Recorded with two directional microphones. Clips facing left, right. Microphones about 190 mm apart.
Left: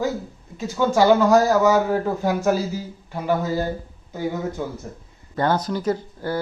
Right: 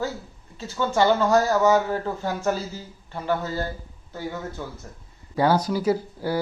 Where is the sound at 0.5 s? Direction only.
15° left (ahead or behind).